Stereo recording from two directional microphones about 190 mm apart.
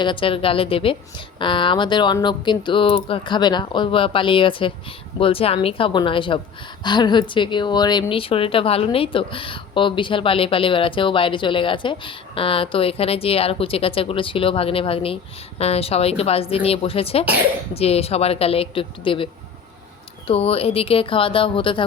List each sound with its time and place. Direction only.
0.0 s a woman's voice: 25° left (ahead or behind)